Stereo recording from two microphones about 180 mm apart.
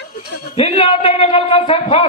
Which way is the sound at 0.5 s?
30° left (ahead or behind).